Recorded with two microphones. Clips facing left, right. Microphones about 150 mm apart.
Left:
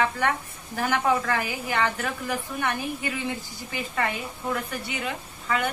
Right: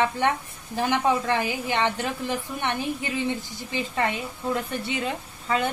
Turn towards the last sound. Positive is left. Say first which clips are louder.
# right 2 dB
turn(degrees=-30)  # may be behind; listen again after turning